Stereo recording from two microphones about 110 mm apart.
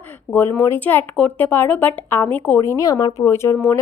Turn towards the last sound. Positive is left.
turn(degrees=25)  # may be behind; listen again after turning